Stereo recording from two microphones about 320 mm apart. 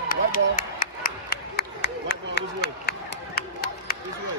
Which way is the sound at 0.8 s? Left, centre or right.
Left.